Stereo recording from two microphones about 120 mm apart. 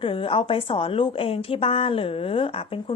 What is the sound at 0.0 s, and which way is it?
A woman's voice, 45° left (ahead or behind).